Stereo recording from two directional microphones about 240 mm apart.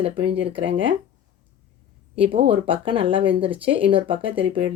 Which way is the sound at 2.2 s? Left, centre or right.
Right.